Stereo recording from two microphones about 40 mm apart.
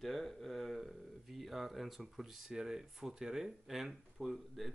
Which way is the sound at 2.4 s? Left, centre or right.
Centre.